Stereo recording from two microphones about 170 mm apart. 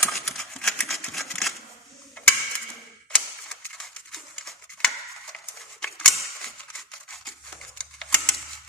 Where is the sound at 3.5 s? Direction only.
Centre (ahead or behind).